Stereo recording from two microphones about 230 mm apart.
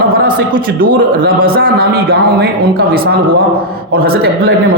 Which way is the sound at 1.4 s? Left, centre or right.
Right.